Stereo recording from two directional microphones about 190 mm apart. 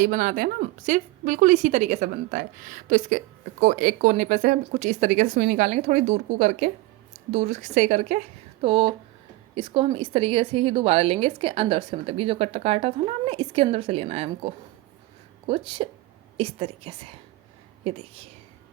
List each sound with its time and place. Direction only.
0.0 s a woman's voice: 45° right (ahead or behind)
15.4 s a woman's voice: 25° right (ahead or behind)